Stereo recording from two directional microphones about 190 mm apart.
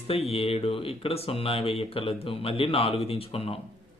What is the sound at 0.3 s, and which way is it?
Speech, 30° left (ahead or behind).